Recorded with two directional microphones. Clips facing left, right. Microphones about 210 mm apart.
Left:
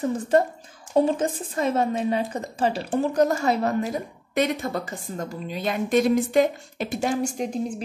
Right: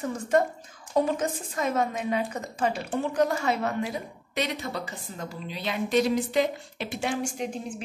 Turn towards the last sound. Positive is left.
turn(degrees=40)  # may be behind; listen again after turning